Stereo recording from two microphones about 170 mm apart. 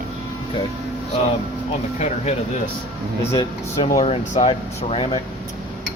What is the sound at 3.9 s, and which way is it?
Speech, 40° left (ahead or behind).